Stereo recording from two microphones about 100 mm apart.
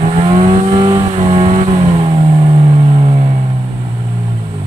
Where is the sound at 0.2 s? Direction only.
85° right.